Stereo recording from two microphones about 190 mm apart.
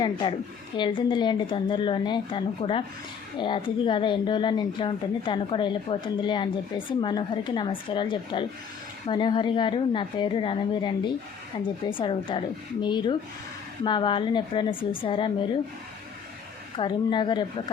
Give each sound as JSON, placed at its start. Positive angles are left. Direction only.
{"t": 0.0, "sound": "a woman's voice", "side_deg": 25}
{"t": 16.7, "sound": "a woman's voice", "side_deg": 25}